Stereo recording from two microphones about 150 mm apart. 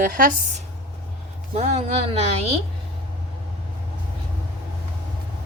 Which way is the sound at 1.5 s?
45° right (ahead or behind).